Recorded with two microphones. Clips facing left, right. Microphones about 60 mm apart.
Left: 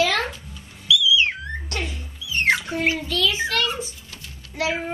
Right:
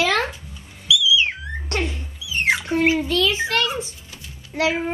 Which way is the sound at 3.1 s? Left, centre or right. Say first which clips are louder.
Right 3 dB; right.